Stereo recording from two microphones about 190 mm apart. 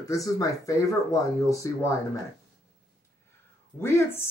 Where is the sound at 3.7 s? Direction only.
10° left (ahead or behind).